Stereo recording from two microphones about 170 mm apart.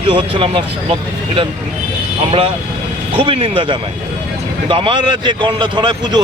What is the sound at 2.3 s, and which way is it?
A man's voice, 35° right (ahead or behind).